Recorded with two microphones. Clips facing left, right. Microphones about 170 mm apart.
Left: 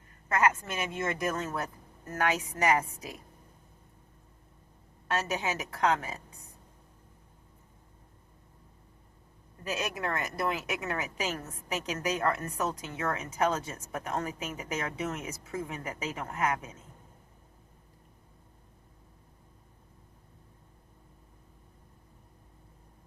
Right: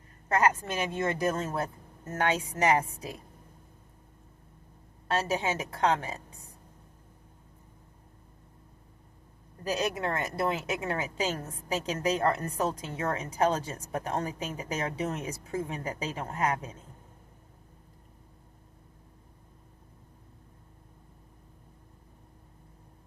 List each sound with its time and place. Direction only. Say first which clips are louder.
0.3 s speech: right 1 dB; 35° right (ahead or behind)
5.0 s speech: right 3 dB; 30° right (ahead or behind)
9.6 s a woman's voice: right 3 dB; 35° right (ahead or behind)